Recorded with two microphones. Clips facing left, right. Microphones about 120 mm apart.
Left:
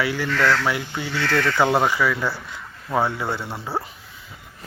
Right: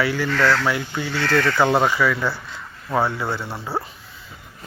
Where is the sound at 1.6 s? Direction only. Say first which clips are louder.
Even; 10° left (ahead or behind).